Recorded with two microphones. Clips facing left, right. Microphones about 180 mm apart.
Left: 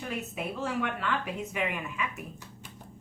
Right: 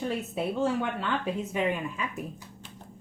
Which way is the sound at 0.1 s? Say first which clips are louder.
Right 5 dB; 30° right (ahead or behind).